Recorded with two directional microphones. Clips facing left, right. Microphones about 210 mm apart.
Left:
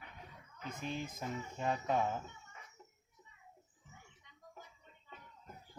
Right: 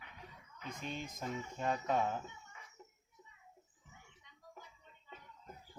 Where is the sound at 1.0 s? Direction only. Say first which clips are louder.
Left 1 dB; 5° left (ahead or behind).